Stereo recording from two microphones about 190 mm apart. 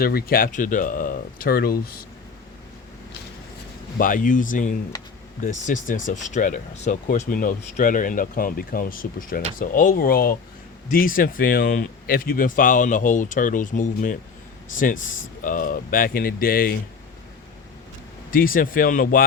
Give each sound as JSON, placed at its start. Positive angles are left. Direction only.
{"t": 0.0, "sound": "speech", "side_deg": 55}
{"t": 3.9, "sound": "speech", "side_deg": 45}
{"t": 18.3, "sound": "speech", "side_deg": 50}